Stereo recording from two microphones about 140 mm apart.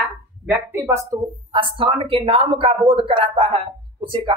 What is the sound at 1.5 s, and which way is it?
Speech, 40° right (ahead or behind).